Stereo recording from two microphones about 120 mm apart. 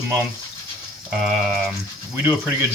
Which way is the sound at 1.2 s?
Centre (ahead or behind).